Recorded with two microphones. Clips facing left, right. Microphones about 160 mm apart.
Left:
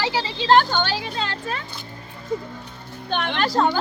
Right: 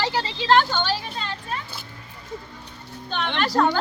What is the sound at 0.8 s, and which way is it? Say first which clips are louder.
Speech: left 2 dB; 75° left (ahead or behind).